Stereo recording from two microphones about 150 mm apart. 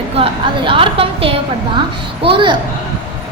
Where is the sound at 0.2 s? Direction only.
35° right (ahead or behind).